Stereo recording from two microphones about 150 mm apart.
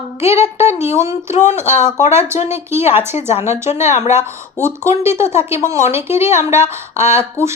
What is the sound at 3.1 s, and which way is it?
Speech, 45° left (ahead or behind).